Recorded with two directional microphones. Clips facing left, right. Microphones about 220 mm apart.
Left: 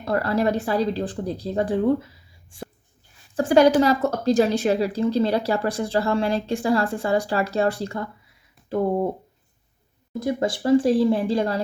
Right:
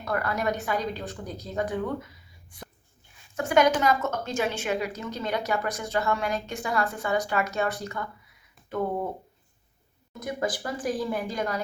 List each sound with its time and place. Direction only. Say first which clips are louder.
0.0 s a woman's voice: left 6 dB; 30° left (ahead or behind)
10.1 s a woman's voice: left 6 dB; 30° left (ahead or behind)